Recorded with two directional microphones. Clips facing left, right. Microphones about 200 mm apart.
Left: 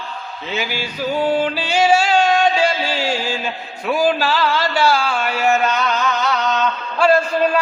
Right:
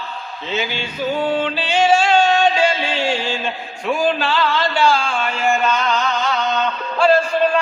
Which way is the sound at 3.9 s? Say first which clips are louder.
Left 1 dB; 5° left (ahead or behind).